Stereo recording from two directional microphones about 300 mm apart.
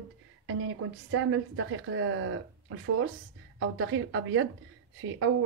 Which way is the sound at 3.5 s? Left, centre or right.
Right.